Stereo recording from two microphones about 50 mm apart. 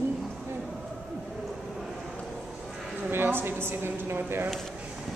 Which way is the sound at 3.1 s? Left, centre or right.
Right.